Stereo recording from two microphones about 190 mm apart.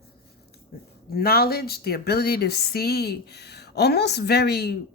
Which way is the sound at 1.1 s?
55° left (ahead or behind).